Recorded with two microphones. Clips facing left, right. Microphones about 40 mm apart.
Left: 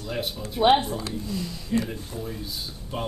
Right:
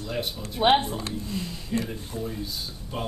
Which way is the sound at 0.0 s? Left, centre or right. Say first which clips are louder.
Even; centre.